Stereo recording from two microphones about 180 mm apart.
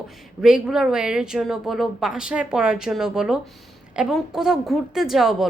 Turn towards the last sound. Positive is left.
turn(degrees=0)  # may be behind; listen again after turning